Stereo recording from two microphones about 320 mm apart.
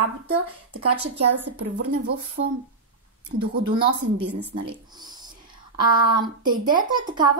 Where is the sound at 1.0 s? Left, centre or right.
Right.